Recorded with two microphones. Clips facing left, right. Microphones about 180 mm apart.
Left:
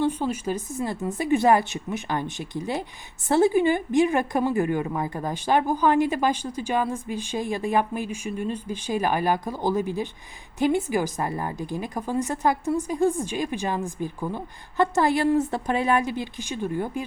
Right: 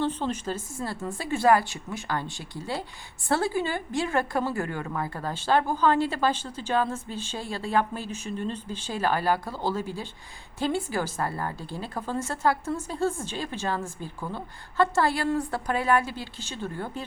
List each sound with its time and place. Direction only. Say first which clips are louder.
0.0 s a woman's voice: left 3 dB; 10° left (ahead or behind)